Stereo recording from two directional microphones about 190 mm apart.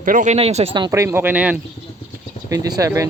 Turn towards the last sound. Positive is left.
turn(degrees=-15)  # may be behind; listen again after turning